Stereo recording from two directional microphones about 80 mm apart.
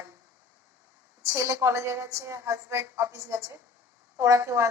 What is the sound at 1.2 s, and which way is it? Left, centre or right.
A woman's voice, right.